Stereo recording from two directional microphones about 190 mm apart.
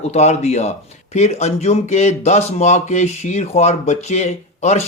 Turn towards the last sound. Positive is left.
turn(degrees=35)  # may be behind; listen again after turning